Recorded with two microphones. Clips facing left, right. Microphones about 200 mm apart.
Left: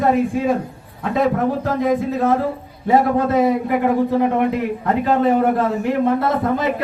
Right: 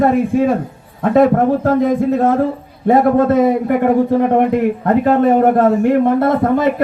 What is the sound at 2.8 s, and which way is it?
A man's voice, 55° right (ahead or behind).